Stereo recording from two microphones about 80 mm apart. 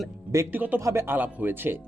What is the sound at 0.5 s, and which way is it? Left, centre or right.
Speech, right.